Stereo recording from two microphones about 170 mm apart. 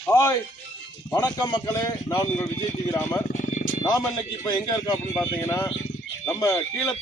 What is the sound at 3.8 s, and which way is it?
Speech, 25° left (ahead or behind).